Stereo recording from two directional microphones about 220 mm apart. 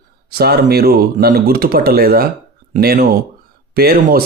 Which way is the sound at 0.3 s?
45° right (ahead or behind).